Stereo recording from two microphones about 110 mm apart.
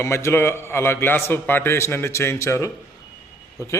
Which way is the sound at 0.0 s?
25° left (ahead or behind).